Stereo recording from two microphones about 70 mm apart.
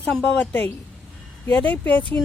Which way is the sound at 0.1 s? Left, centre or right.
Centre.